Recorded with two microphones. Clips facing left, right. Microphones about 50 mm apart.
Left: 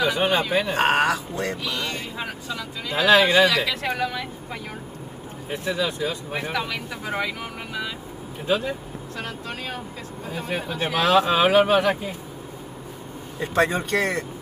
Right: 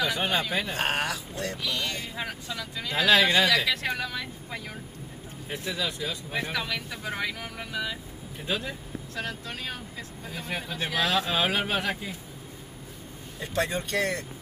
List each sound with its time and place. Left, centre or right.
0.0 s speech: left
0.7 s speech: left
1.6 s speech: centre
5.5 s speech: centre
8.5 s speech: centre
13.4 s speech: left